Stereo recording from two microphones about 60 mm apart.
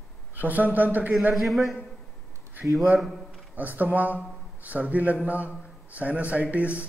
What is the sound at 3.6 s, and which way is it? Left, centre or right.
A man's voice, right.